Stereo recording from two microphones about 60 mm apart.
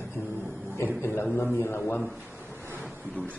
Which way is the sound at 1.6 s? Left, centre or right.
Left.